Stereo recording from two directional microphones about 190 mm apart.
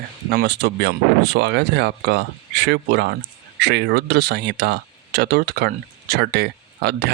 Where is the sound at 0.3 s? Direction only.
65° right (ahead or behind).